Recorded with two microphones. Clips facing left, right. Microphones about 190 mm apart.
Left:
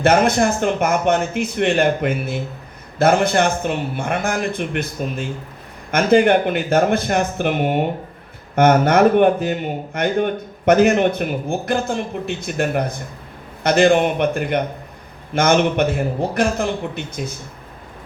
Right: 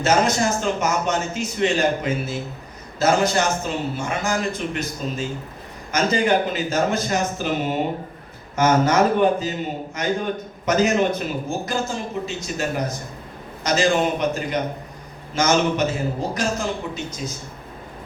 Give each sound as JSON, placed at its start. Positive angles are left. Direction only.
{"t": 0.0, "sound": "a man's voice", "side_deg": 60}